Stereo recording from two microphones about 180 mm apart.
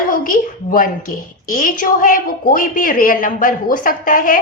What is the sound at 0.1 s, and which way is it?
A woman's voice, 50° left (ahead or behind).